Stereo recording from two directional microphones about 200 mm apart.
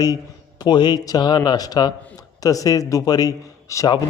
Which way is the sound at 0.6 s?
20° left (ahead or behind).